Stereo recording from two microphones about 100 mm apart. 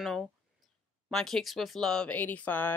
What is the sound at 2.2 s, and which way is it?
Speech, 20° left (ahead or behind).